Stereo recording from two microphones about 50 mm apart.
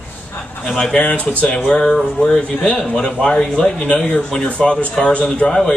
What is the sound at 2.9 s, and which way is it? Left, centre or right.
Speech, left.